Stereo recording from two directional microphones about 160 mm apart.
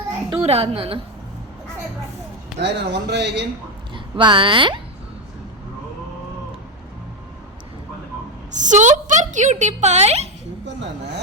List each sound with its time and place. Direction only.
0.4 s a woman's voice: 40° right (ahead or behind)
2.6 s speech: 90° right
3.9 s speech: 30° right (ahead or behind)
8.5 s speech: 50° right (ahead or behind)